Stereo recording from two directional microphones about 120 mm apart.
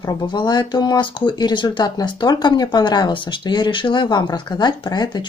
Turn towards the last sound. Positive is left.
turn(degrees=35)  # may be behind; listen again after turning